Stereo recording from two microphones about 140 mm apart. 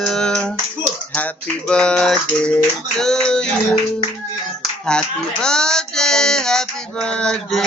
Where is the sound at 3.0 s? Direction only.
5° left (ahead or behind).